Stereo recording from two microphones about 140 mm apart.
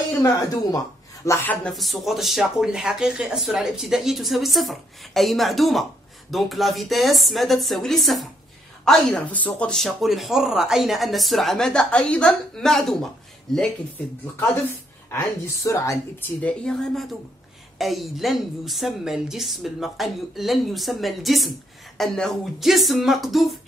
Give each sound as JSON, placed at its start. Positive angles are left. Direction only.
{"t": 0.2, "sound": "a woman's voice", "side_deg": 25}
{"t": 1.8, "sound": "a woman's voice", "side_deg": 0}
{"t": 15.0, "sound": "a woman's voice", "side_deg": 20}
{"t": 16.3, "sound": "a woman's voice", "side_deg": 5}